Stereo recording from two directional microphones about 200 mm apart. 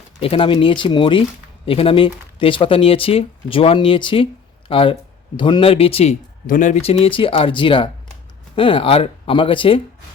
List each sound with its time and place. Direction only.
0.2 s speech: 25° left (ahead or behind)